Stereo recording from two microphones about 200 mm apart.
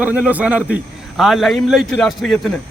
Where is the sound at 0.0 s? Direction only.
5° right (ahead or behind).